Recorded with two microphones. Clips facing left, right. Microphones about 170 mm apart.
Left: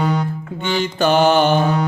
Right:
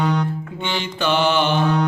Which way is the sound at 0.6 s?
45° left (ahead or behind).